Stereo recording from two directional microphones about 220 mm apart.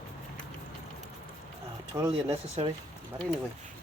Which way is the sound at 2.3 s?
25° right (ahead or behind).